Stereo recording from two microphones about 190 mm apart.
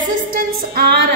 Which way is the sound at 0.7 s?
60° right (ahead or behind).